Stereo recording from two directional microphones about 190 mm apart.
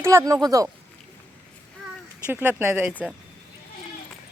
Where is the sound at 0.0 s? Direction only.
15° right (ahead or behind).